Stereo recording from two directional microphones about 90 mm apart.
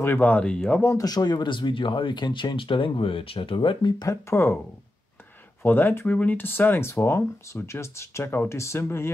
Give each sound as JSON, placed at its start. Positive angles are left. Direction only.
{"t": 0.0, "sound": "speech", "side_deg": 20}
{"t": 0.9, "sound": "speech", "side_deg": 45}
{"t": 4.0, "sound": "speech", "side_deg": 35}
{"t": 5.6, "sound": "speech", "side_deg": 20}